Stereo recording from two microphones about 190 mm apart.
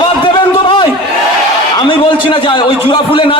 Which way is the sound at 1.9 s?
25° left (ahead or behind).